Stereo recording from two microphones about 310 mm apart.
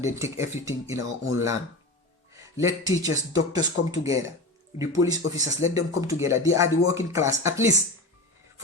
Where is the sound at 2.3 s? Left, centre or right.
Centre.